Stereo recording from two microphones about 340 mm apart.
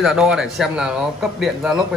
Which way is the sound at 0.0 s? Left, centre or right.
Centre.